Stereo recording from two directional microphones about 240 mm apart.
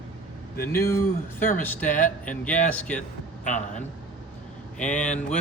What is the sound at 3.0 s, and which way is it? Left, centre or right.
Speech, left.